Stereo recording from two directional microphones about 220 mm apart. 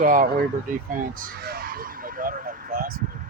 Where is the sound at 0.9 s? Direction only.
40° right (ahead or behind).